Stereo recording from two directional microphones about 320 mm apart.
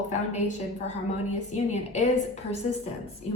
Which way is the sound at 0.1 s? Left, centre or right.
Left.